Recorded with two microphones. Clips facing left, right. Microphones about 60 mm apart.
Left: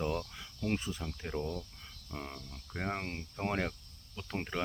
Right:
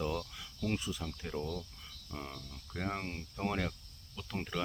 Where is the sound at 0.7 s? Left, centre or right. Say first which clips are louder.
Left 1 dB; left.